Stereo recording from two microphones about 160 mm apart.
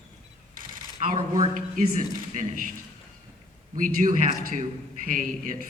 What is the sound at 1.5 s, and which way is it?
Speech, 55° right (ahead or behind).